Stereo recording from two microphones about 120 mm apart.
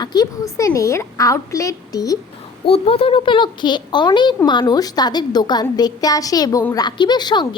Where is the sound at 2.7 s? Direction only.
50° left (ahead or behind).